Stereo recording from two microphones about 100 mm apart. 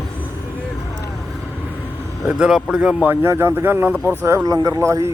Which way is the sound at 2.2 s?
10° right (ahead or behind).